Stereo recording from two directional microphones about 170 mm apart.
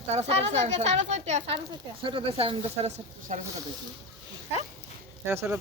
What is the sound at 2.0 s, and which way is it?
Speech, 30° right (ahead or behind).